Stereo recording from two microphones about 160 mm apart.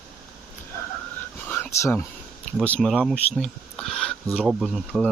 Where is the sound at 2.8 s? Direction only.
Centre (ahead or behind).